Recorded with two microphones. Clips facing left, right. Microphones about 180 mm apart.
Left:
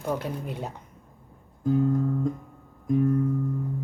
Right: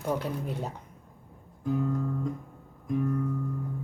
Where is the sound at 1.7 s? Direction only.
35° left (ahead or behind).